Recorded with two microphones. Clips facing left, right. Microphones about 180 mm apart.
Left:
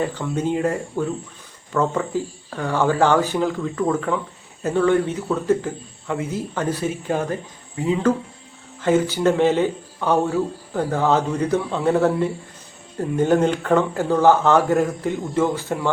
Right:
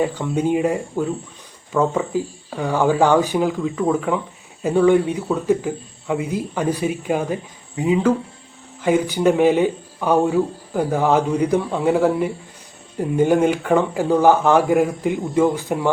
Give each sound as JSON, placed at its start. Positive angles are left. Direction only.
{"t": 0.0, "sound": "speech", "side_deg": -10}